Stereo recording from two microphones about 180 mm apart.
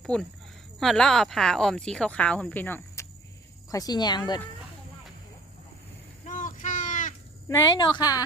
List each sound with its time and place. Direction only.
0.0 s a woman's voice: 5° left (ahead or behind); by 4.4 s 25° left (ahead or behind)
6.2 s a sound: 45° left (ahead or behind)
7.4 s a woman's voice: 15° left (ahead or behind)